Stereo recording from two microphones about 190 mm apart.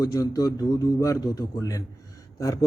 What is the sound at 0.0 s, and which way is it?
Speech, 20° left (ahead or behind).